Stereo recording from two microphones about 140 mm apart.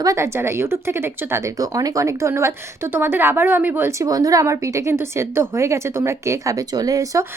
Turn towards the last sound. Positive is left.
turn(degrees=-25)  # may be behind; listen again after turning